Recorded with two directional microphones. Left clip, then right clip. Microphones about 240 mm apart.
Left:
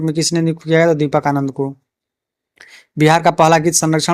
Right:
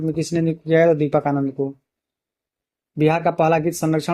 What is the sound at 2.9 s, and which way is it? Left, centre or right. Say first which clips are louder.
Speech: left 6 dB; left.